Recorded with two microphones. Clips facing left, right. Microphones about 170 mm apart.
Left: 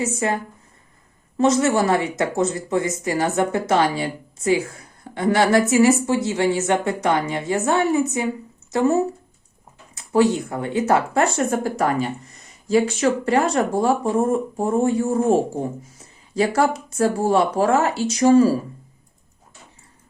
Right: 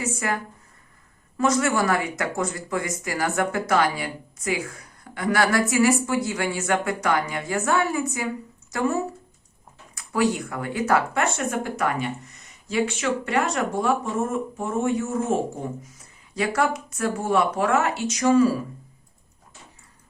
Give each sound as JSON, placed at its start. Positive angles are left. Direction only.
{"t": 0.0, "sound": "speech", "side_deg": 25}
{"t": 1.4, "sound": "speech", "side_deg": 25}